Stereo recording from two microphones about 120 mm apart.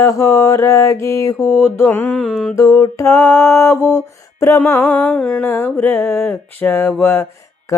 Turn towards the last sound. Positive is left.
turn(degrees=15)  # may be behind; listen again after turning